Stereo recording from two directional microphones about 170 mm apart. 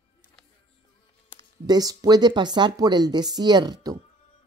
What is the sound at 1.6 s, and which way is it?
A woman's voice, 25° right (ahead or behind).